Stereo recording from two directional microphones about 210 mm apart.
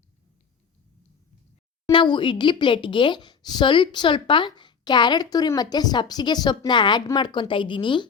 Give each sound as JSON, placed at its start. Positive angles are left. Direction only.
{"t": 1.9, "sound": "a woman's voice", "side_deg": 25}